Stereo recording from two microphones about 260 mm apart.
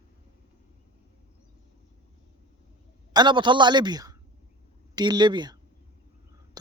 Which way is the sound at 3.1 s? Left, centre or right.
Centre.